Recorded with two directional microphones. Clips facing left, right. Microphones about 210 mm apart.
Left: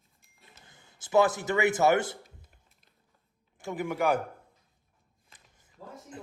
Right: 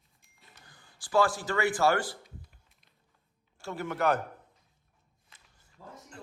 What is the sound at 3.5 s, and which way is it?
Speech, 15° left (ahead or behind).